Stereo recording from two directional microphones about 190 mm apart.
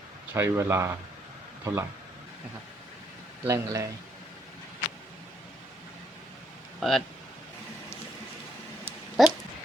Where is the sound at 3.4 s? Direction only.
15° right (ahead or behind).